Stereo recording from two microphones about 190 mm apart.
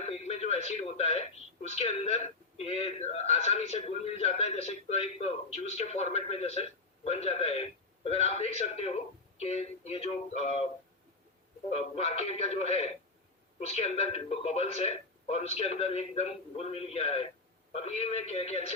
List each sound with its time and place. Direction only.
0.0 s speech: 35° left (ahead or behind)
11.7 s speech: 35° left (ahead or behind)